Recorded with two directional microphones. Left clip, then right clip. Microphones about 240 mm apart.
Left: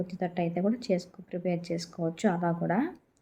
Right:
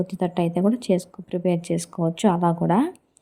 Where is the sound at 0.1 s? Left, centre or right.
Right.